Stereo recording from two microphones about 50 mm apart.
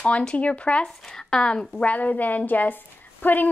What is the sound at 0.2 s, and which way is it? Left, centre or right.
Speech, left.